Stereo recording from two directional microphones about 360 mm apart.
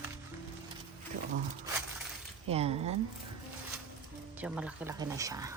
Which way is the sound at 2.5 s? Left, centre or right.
Centre.